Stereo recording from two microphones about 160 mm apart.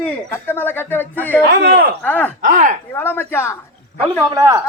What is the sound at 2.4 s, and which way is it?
Speech, 55° right (ahead or behind).